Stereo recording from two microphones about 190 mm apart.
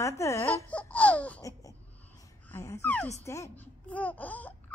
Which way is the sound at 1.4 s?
15° left (ahead or behind).